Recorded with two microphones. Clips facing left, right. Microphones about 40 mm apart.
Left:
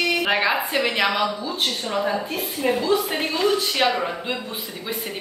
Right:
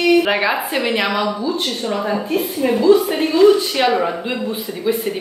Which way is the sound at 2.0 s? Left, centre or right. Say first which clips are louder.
Right 5 dB; centre.